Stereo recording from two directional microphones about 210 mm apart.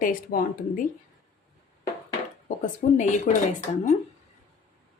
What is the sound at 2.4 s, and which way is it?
Speech, 35° left (ahead or behind).